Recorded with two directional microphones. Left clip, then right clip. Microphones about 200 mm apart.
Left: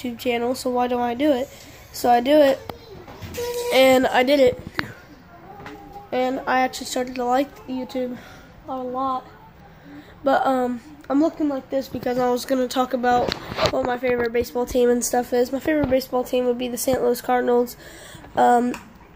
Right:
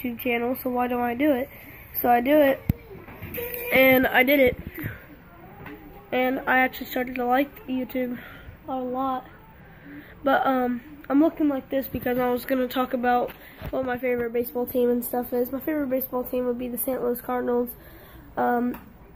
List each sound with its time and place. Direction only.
0.0 s speech: 15° left (ahead or behind)
3.7 s speech: 10° left (ahead or behind)
6.0 s a woman's voice: 5° left (ahead or behind)
10.2 s speech: 10° left (ahead or behind)